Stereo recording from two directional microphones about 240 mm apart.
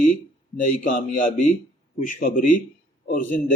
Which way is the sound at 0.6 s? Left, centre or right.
Left.